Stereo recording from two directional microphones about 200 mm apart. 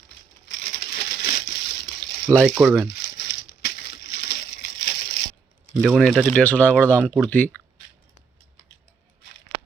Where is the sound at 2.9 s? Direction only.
60° left (ahead or behind).